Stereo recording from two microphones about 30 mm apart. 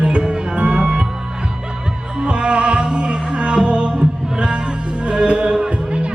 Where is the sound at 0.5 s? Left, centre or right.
Right.